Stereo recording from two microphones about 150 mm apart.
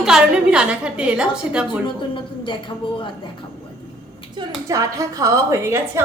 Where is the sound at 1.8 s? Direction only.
35° left (ahead or behind).